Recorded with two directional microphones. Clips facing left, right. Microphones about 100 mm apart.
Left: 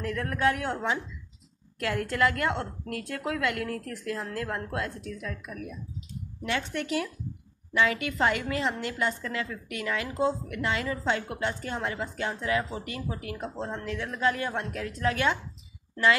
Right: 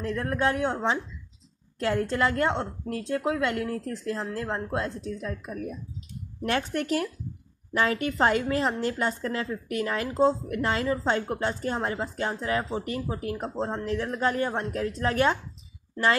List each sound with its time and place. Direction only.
0.0 s a woman's voice: 30° right (ahead or behind)